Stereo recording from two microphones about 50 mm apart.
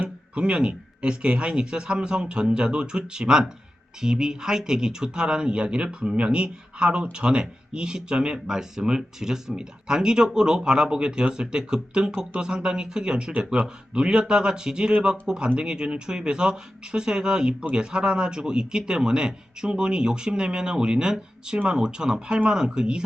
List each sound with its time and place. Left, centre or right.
0.3 s a man's voice: centre